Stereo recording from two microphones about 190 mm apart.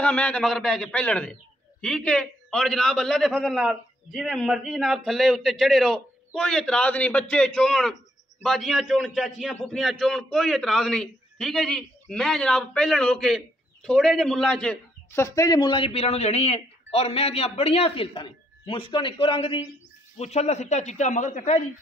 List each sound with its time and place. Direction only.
0.0 s a man's voice: 5° left (ahead or behind)
15.2 s a man's voice: 20° left (ahead or behind); by 21.6 s 40° left (ahead or behind)